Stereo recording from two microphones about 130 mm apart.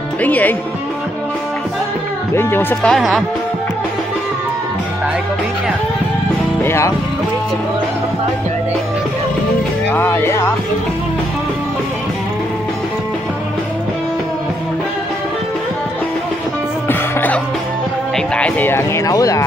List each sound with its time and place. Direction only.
0.2 s speech: 10° left (ahead or behind)
2.3 s speech: 15° left (ahead or behind); by 3.3 s centre (ahead or behind)
6.6 s speech: 20° left (ahead or behind)
9.9 s speech: 15° left (ahead or behind)
16.8 s music: 15° left (ahead or behind)
18.1 s speech: 10° left (ahead or behind); by 19.4 s 25° left (ahead or behind)